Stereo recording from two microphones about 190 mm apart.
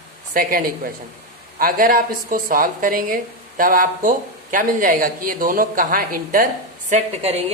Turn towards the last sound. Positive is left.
turn(degrees=-35)  # may be behind; listen again after turning